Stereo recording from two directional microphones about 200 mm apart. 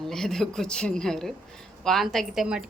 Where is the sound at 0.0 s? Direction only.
Centre (ahead or behind).